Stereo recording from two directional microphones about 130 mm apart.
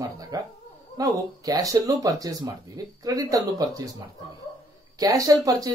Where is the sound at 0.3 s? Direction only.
25° right (ahead or behind).